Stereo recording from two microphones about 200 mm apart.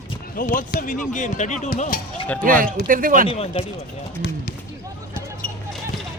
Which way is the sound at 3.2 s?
30° left (ahead or behind).